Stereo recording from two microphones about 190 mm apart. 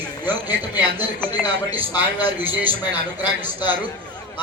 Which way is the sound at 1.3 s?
20° left (ahead or behind).